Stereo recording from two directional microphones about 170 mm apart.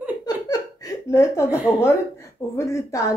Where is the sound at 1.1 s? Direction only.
15° left (ahead or behind).